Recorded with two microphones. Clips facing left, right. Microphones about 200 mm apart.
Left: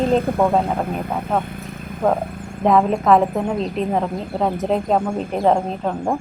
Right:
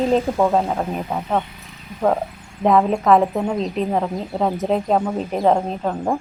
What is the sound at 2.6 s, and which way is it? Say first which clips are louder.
A woman's voice: even; centre (ahead or behind).